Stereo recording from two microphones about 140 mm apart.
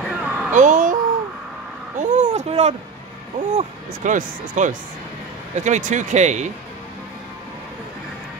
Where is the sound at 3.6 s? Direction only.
65° right (ahead or behind).